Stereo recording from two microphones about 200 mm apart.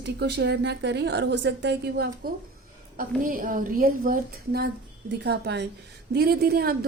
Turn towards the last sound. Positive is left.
turn(degrees=-50)  # may be behind; listen again after turning